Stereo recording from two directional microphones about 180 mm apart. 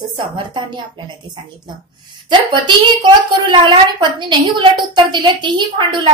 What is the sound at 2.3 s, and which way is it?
A woman's voice, 25° right (ahead or behind).